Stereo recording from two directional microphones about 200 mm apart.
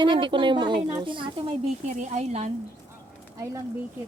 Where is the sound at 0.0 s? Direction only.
25° right (ahead or behind).